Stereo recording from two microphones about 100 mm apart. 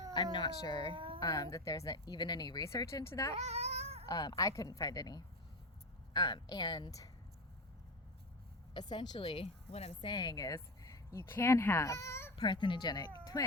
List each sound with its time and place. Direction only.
0.1 s a woman's voice: 50° left (ahead or behind)
0.9 s a sound: 60° right (ahead or behind)
1.2 s a woman's voice: 40° left (ahead or behind)
2.6 s a woman's voice: 30° left (ahead or behind)
3.3 s a sound: 90° right
4.0 s a woman's voice: 40° left (ahead or behind)
8.7 s a woman's voice: 45° left (ahead or behind); by 10.1 s 80° left
10.1 s speech: 45° left (ahead or behind); by 12.3 s 25° left (ahead or behind)
12.4 s a woman's voice: 55° left (ahead or behind); by 13.5 s 35° left (ahead or behind)